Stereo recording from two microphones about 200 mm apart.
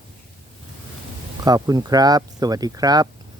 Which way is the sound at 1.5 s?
20° right (ahead or behind).